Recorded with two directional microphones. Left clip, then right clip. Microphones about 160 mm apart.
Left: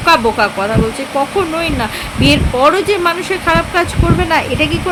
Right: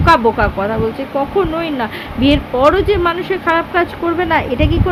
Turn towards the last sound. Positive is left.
turn(degrees=10)  # may be behind; listen again after turning